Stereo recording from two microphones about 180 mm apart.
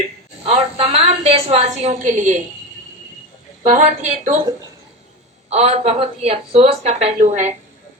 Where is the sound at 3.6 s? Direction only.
40° right (ahead or behind).